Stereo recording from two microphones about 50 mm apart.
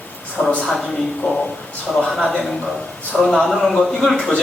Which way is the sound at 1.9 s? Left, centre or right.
Centre.